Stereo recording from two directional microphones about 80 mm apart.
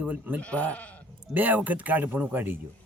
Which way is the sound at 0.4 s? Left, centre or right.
Centre.